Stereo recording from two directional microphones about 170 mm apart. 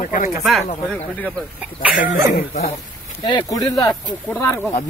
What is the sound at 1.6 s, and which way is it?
Speech, 10° right (ahead or behind).